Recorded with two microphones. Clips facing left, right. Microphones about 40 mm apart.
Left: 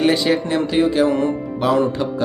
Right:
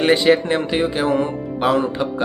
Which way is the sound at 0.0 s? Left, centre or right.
Right.